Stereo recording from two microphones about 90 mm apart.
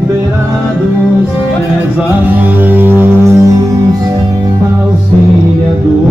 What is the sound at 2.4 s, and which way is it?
Music, 20° right (ahead or behind).